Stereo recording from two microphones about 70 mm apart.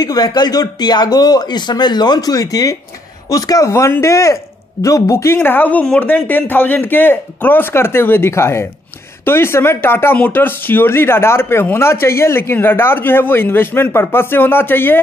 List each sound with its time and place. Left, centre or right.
0.0 s speech: left